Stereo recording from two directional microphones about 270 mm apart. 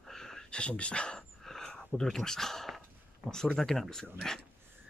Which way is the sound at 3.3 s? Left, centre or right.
Centre.